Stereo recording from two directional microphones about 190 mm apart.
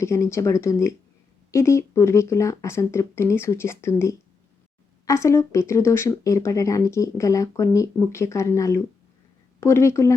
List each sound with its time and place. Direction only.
0.0 s speech: 15° left (ahead or behind)